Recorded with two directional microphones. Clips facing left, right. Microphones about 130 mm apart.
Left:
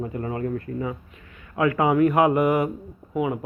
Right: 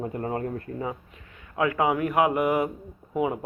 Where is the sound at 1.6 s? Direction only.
15° right (ahead or behind).